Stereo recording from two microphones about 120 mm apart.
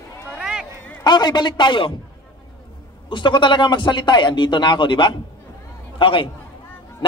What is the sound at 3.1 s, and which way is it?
A man's voice, 40° left (ahead or behind).